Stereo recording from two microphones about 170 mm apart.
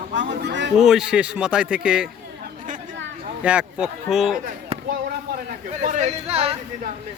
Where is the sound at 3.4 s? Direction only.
5° right (ahead or behind).